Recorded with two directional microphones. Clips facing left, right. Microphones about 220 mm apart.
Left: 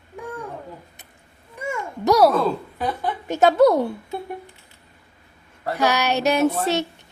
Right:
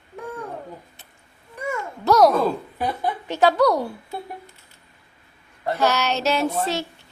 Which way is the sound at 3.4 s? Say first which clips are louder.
Left 3 dB; 25° left (ahead or behind).